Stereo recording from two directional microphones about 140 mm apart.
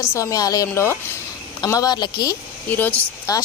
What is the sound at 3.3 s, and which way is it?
Speech, 25° left (ahead or behind).